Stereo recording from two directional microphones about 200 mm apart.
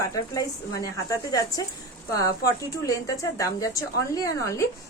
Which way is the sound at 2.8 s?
15° left (ahead or behind).